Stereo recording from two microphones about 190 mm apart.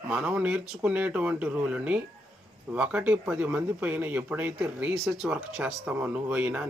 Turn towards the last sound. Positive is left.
turn(degrees=-5)  # may be behind; listen again after turning